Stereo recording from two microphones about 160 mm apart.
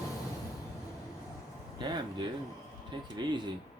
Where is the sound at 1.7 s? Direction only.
30° right (ahead or behind).